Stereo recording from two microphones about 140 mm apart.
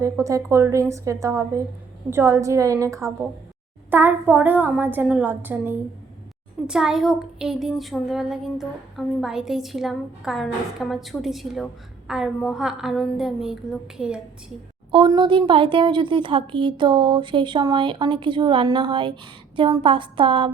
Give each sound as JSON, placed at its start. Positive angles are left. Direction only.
{"t": 0.0, "sound": "a woman's voice", "side_deg": -20}
{"t": 14.9, "sound": "a woman's voice", "side_deg": -35}